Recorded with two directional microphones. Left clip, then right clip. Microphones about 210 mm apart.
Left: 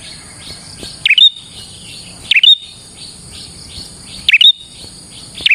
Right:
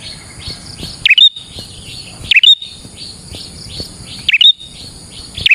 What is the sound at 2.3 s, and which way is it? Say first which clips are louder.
Bird vocalization: right 1 dB; 20° right (ahead or behind).